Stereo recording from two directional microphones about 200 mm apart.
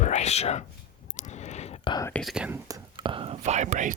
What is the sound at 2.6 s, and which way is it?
Whispering, 20° right (ahead or behind).